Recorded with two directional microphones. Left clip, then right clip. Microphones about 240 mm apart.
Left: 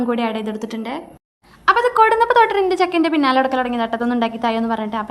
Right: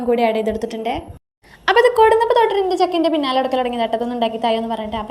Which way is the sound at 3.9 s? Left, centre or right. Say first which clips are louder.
Even; left.